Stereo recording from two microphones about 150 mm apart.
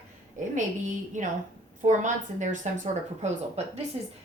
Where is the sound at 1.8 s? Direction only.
55° right (ahead or behind).